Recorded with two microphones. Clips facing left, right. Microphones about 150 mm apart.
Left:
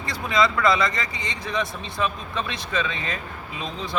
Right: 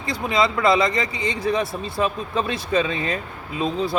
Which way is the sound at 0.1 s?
25° right (ahead or behind).